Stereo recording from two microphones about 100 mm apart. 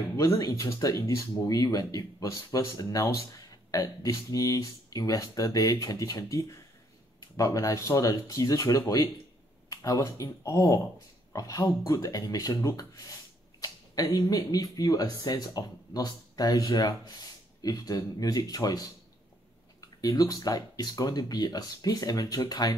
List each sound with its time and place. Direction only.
0.1 s speech: 30° left (ahead or behind)
11.3 s speech: 40° left (ahead or behind)
20.0 s speech: 40° left (ahead or behind)